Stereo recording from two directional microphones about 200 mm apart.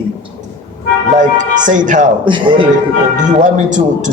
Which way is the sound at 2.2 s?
25° right (ahead or behind).